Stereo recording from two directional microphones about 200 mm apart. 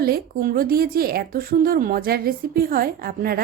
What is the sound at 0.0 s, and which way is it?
Speech, 50° right (ahead or behind).